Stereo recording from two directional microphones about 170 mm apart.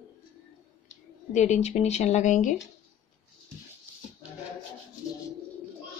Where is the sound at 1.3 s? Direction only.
45° left (ahead or behind).